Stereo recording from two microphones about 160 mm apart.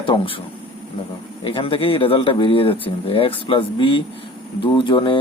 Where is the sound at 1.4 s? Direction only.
35° left (ahead or behind).